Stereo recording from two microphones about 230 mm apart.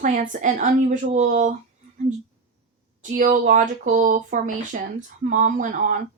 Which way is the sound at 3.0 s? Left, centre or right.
Right.